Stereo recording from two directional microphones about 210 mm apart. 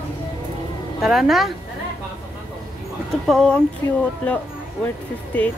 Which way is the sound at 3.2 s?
Centre (ahead or behind).